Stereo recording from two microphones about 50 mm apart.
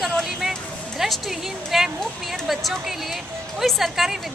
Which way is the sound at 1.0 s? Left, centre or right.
Centre.